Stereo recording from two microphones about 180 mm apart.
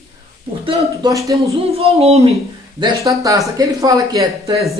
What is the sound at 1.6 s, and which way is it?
Speech, 35° right (ahead or behind).